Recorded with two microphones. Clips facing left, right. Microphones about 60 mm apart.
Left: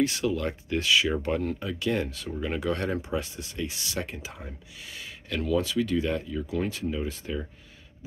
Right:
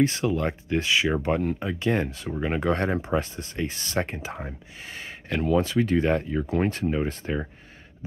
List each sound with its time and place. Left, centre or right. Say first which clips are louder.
0.0 s speech: right 3 dB; right